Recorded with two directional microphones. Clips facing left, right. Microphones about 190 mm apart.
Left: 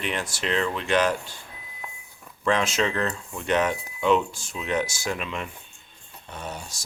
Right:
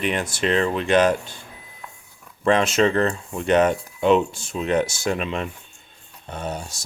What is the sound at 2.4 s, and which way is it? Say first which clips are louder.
Speech: right 6 dB; 30° right (ahead or behind).